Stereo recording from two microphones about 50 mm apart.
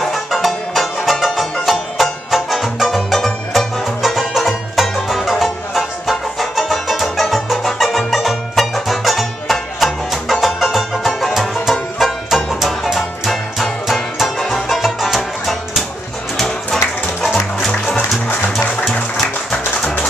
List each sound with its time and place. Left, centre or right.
0.0 s music: centre